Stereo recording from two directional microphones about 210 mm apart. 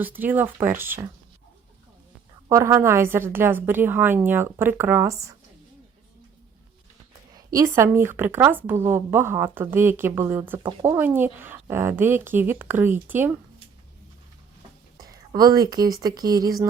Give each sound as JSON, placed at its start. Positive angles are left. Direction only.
{"t": 0.0, "sound": "speech", "side_deg": -10}
{"t": 2.5, "sound": "speech", "side_deg": -15}
{"t": 7.3, "sound": "speech", "side_deg": -15}
{"t": 14.9, "sound": "speech", "side_deg": -20}